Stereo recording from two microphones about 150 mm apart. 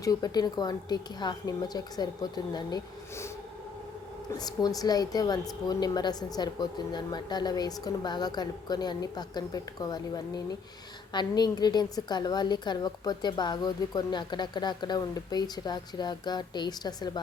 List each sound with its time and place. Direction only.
0.0 s speech: 25° left (ahead or behind)
4.3 s speech: 25° left (ahead or behind)